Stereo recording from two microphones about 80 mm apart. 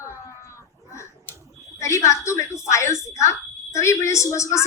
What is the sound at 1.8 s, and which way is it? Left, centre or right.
A woman's voice, left.